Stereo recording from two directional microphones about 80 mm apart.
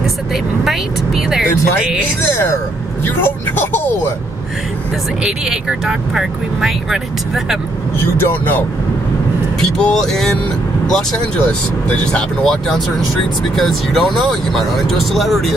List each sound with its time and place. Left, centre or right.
0.3 s vehicle: centre
3.3 s speech: left
5.2 s speech: centre
8.2 s speech: left
9.8 s speech: centre